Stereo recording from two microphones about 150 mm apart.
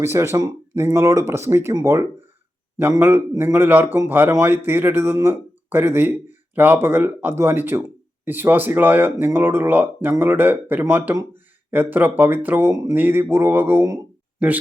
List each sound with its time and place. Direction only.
0.0 s speech: 15° right (ahead or behind)